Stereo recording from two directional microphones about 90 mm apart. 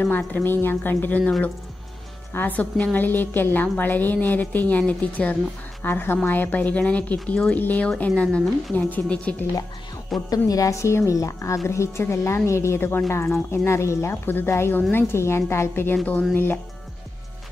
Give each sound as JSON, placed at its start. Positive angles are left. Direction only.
{"t": 0.3, "sound": "a woman's voice", "side_deg": 25}
{"t": 2.3, "sound": "a woman's voice", "side_deg": 20}
{"t": 10.3, "sound": "a woman's voice", "side_deg": 40}